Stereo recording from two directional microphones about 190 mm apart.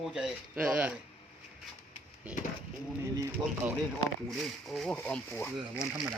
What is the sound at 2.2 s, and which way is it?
Speech, 5° right (ahead or behind).